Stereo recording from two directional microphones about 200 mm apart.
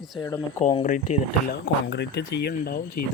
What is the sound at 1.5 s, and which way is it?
Speech, 60° left (ahead or behind).